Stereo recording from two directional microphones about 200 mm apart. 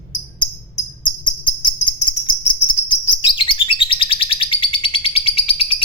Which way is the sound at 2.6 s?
25° left (ahead or behind).